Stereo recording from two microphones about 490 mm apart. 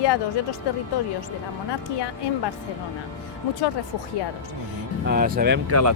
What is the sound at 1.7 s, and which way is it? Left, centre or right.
Speech, left.